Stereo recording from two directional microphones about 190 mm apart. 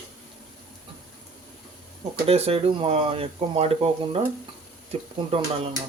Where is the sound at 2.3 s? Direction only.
30° right (ahead or behind).